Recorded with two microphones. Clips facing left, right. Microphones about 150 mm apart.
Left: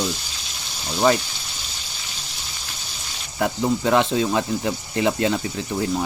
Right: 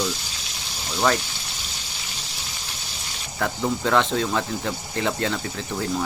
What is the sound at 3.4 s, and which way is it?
Speech, 15° left (ahead or behind).